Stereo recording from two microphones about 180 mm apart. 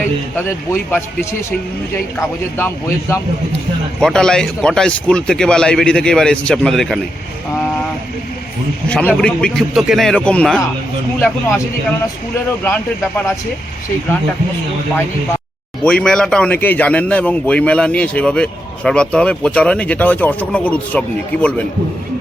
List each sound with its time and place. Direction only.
0.3 s a man's voice: 15° left (ahead or behind)
4.0 s a man's voice: 5° left (ahead or behind)
8.9 s a man's voice: 5° left (ahead or behind)
15.8 s a man's voice: 5° left (ahead or behind)